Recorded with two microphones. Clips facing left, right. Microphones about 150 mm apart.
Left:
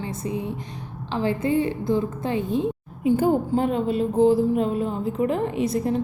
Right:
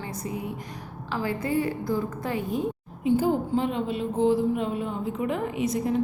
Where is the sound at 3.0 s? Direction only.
50° left (ahead or behind); by 5.8 s 35° left (ahead or behind).